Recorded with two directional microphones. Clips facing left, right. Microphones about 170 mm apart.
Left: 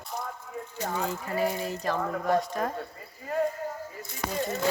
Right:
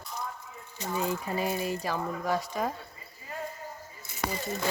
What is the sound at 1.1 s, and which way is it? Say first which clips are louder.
Speech: left 2 dB; 15° right (ahead or behind).